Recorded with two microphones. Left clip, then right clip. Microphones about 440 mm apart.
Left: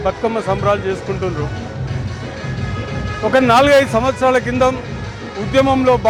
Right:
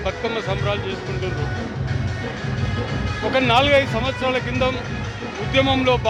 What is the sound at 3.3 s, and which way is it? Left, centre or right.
Speech, left.